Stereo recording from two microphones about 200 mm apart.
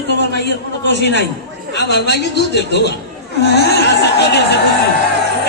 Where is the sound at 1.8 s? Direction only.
55° left (ahead or behind).